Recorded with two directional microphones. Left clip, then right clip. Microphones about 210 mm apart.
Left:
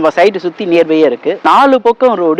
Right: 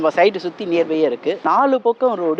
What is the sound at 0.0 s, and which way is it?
Speech, 25° left (ahead or behind).